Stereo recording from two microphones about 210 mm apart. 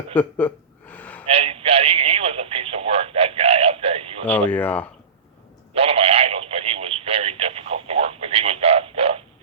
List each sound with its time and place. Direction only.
0.1 s a sound: 5° left (ahead or behind)
1.3 s radio: 25° right (ahead or behind)
4.3 s speech: 5° left (ahead or behind)
5.7 s radio: 30° right (ahead or behind)